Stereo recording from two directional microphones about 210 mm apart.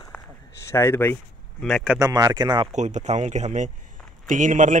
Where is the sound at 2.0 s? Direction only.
15° right (ahead or behind).